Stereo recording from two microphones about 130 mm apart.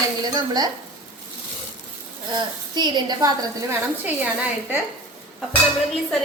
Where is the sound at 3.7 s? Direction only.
15° right (ahead or behind).